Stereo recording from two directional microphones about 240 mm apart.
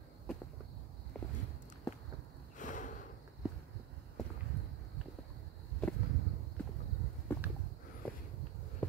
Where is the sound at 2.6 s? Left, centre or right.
Left.